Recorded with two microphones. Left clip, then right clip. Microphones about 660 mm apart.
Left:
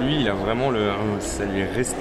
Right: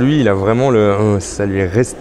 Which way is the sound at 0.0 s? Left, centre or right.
Right.